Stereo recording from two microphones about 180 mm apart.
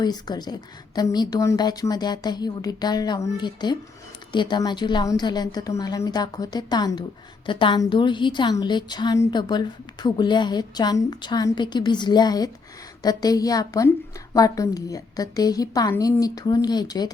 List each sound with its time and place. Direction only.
0.0 s a woman's voice: 25° left (ahead or behind)